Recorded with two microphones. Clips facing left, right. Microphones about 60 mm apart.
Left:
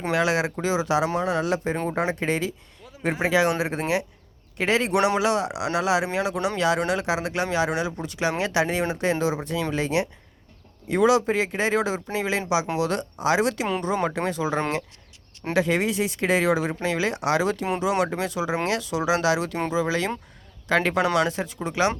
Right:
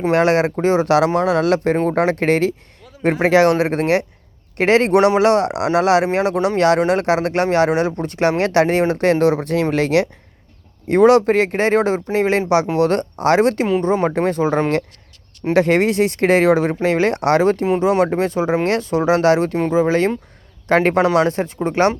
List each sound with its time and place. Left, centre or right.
0.1 s speech: right
0.9 s speech: right
3.0 s speech: right
10.8 s speech: right
15.5 s speech: right